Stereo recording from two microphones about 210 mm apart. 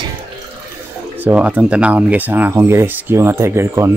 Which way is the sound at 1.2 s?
10° right (ahead or behind).